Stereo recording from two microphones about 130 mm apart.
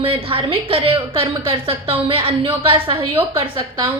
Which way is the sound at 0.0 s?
45° right (ahead or behind).